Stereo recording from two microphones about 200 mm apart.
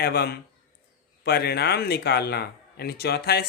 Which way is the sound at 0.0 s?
50° left (ahead or behind).